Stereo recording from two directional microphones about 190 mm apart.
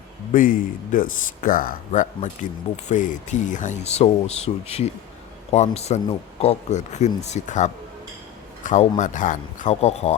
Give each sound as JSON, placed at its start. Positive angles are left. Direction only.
{"t": 0.3, "sound": "speech", "side_deg": 45}